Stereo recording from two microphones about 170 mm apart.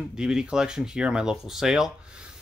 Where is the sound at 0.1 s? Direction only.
5° right (ahead or behind).